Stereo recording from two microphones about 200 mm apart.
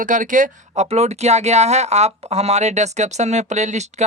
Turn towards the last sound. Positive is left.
turn(degrees=-35)  # may be behind; listen again after turning